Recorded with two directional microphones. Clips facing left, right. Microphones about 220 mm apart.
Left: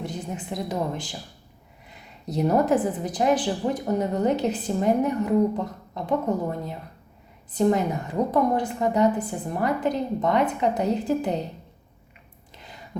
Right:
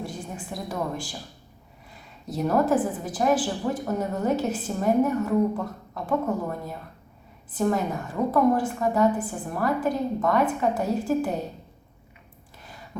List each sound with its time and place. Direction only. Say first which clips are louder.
0.0 s a woman's voice: left 2 dB; 20° left (ahead or behind)
2.2 s a woman's voice: left 2 dB; 20° left (ahead or behind)